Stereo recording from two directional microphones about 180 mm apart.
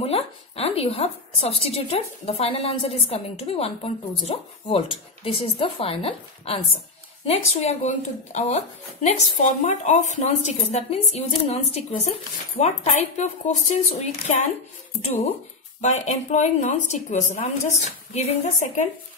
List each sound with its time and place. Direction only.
0.0 s speech: 35° left (ahead or behind)
15.8 s speech: 40° left (ahead or behind)